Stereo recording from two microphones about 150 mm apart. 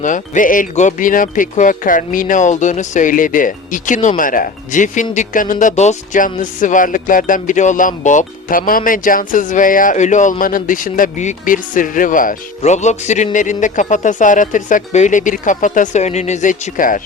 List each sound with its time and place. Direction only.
0.0 s speech: 60° left (ahead or behind)